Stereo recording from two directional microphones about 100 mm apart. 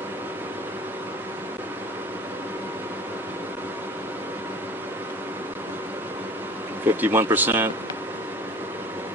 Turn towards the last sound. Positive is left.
turn(degrees=-20)  # may be behind; listen again after turning